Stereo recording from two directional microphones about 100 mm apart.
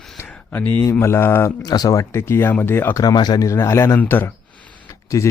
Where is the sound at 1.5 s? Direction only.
40° left (ahead or behind); by 3.0 s 20° left (ahead or behind).